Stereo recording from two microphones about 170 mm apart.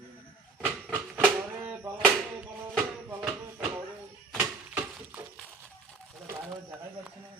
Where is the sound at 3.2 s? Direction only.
5° right (ahead or behind).